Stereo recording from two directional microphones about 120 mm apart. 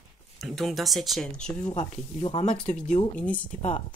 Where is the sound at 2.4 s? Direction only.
80° left.